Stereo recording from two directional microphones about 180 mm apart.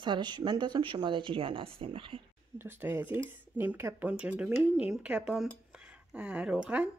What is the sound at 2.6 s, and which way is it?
Speech, 10° right (ahead or behind).